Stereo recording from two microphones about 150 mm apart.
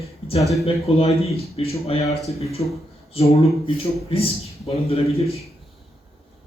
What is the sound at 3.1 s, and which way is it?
Speech, 40° left (ahead or behind).